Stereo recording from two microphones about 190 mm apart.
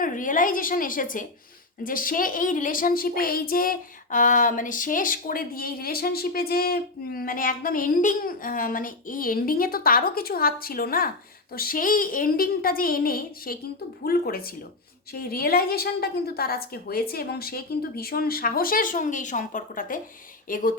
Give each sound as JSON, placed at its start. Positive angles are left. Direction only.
{"t": 0.0, "sound": "a woman's voice", "side_deg": 45}